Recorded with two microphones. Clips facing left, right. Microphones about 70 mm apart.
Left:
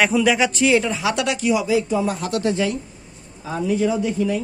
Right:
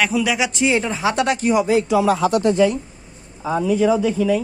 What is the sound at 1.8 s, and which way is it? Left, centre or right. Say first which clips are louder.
Speech: right 5 dB; right.